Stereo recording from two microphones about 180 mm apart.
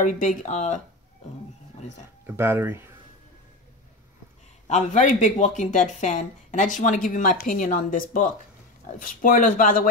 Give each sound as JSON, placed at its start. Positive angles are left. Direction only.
{"t": 0.0, "sound": "speech", "side_deg": 45}
{"t": 2.2, "sound": "speech", "side_deg": -10}
{"t": 4.6, "sound": "speech", "side_deg": 40}